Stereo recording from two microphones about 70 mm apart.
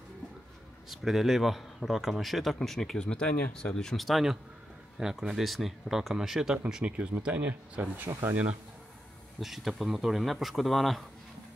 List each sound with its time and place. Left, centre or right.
0.8 s speech: centre
6.6 s speech: centre
8.1 s speech: right
9.4 s speech: centre